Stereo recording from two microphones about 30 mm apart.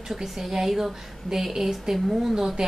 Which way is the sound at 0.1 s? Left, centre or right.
Centre.